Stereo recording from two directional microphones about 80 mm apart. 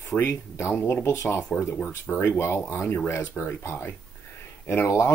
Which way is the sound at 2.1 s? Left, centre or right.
Left.